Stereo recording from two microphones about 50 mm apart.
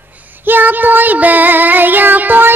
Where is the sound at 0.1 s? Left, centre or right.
Right.